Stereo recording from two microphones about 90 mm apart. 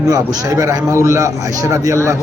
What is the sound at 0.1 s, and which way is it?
A man's voice, 45° right (ahead or behind).